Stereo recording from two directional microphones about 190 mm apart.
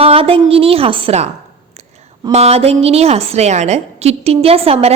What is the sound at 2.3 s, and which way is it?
A woman's voice, 35° right (ahead or behind).